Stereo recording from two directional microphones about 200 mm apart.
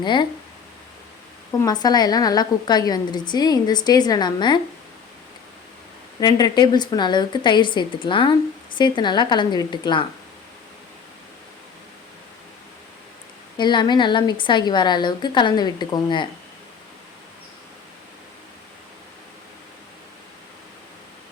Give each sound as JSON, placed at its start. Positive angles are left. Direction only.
{"t": 0.0, "sound": "a woman's voice", "side_deg": 25}
{"t": 1.6, "sound": "a woman's voice", "side_deg": 20}
{"t": 6.1, "sound": "a woman's voice", "side_deg": 20}
{"t": 13.6, "sound": "a woman's voice", "side_deg": 20}